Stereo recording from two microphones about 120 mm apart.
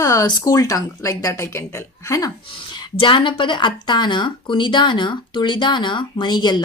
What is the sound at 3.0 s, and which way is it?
Speech, 45° left (ahead or behind).